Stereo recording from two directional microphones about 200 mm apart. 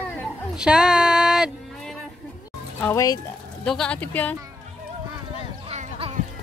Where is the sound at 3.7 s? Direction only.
5° left (ahead or behind).